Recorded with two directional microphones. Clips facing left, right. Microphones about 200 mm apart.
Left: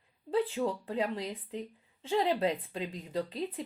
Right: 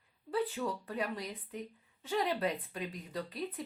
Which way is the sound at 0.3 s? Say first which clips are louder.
Left 4 dB; 25° left (ahead or behind).